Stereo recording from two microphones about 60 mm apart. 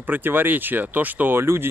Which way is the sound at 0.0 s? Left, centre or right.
Right.